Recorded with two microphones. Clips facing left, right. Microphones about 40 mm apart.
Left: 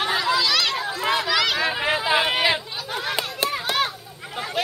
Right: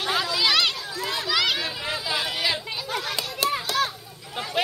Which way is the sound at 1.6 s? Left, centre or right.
Left.